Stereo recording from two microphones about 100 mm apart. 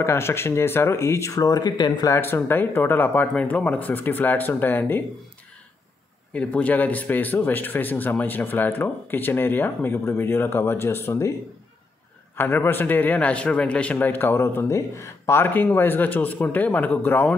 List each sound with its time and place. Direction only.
0.0 s speech: 25° left (ahead or behind); by 2.0 s 45° left (ahead or behind)
2.0 s speech: 25° left (ahead or behind)
6.3 s speech: 10° left (ahead or behind)
12.4 s speech: 20° left (ahead or behind)